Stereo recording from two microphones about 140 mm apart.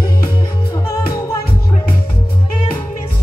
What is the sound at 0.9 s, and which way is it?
Music, 25° left (ahead or behind).